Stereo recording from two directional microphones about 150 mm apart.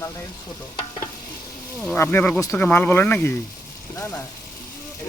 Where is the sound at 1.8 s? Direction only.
15° left (ahead or behind).